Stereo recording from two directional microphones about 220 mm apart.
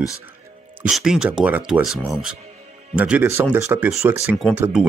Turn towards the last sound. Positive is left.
turn(degrees=-10)  # may be behind; listen again after turning